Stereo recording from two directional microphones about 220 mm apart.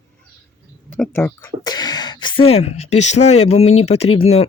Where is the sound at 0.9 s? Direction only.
10° left (ahead or behind).